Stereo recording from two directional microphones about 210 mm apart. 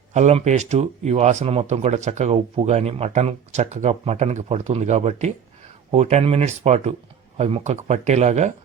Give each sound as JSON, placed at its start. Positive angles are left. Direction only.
{"t": 0.1, "sound": "speech", "side_deg": -35}